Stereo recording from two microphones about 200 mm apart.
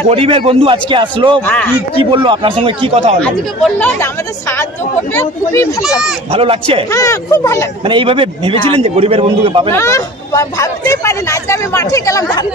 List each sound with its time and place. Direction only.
0.1 s a man's voice: 30° right (ahead or behind)
1.5 s speech: 10° left (ahead or behind)
2.2 s a man's voice: 25° right (ahead or behind)
3.2 s speech: 5° left (ahead or behind)
5.1 s speech: 10° left (ahead or behind)
6.3 s a man's voice: 30° right (ahead or behind)
6.9 s speech: 15° left (ahead or behind)
7.8 s a man's voice: 25° right (ahead or behind)
9.7 s speech: 15° left (ahead or behind)